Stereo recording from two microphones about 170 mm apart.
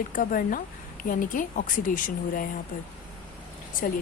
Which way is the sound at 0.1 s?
50° left (ahead or behind).